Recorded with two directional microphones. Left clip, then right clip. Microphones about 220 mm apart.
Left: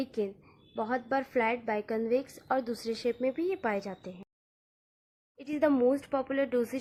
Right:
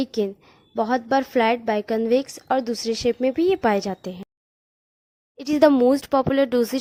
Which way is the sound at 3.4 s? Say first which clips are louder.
Right 12 dB; 50° right (ahead or behind).